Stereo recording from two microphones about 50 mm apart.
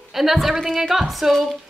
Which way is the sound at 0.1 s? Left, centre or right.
Centre.